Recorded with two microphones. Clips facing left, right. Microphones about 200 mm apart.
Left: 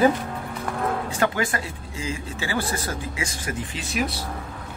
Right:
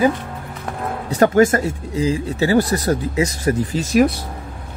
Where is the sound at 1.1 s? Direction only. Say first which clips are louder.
Right 11 dB; 40° right (ahead or behind).